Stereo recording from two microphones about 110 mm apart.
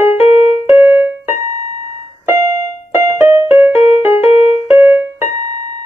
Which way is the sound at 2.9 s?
25° right (ahead or behind).